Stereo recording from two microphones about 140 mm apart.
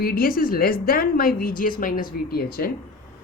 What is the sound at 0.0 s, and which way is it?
Speech, 90° left.